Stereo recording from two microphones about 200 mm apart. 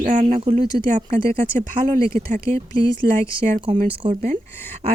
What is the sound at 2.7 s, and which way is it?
Speech, 25° right (ahead or behind).